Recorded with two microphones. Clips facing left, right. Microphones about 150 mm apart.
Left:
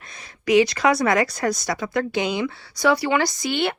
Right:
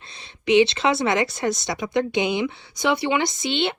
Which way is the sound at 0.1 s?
25° right (ahead or behind).